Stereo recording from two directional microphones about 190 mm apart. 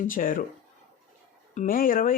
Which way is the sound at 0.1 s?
45° left (ahead or behind).